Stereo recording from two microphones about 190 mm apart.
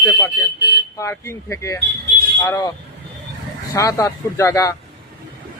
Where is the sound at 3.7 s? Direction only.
15° left (ahead or behind).